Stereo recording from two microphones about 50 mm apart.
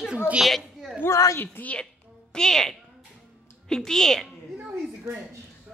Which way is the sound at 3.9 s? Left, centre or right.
Centre.